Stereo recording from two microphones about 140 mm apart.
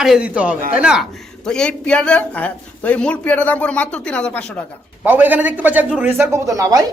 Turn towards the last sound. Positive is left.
turn(degrees=-25)  # may be behind; listen again after turning